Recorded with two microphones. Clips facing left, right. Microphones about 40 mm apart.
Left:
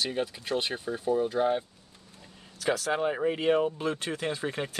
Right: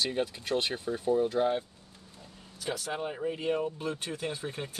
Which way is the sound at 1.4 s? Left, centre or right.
Centre.